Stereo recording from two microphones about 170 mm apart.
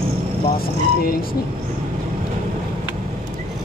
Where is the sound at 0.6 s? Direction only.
60° left (ahead or behind).